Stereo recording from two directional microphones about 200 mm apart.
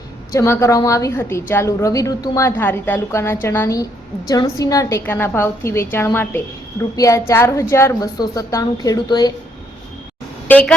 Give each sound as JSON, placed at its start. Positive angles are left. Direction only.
{"t": 0.3, "sound": "a woman's voice", "side_deg": 15}
{"t": 10.5, "sound": "speech", "side_deg": 5}